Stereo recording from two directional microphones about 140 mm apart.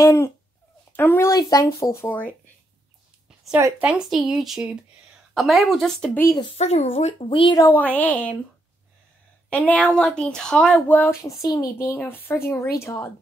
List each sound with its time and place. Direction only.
0.0 s speech: 20° left (ahead or behind)
1.3 s speech: 25° left (ahead or behind)
3.3 s a sound: 5° right (ahead or behind)
3.8 s speech: 10° right (ahead or behind)
6.1 s speech: 20° left (ahead or behind)
6.6 s speech: 50° left (ahead or behind)
7.5 s speech: 15° left (ahead or behind)
9.5 s speech: 10° left (ahead or behind)